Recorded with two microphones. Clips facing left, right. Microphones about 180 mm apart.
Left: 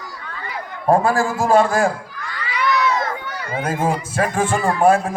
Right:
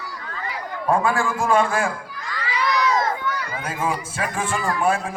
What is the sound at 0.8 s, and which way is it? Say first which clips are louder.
A man's voice: left 4 dB; 40° left (ahead or behind).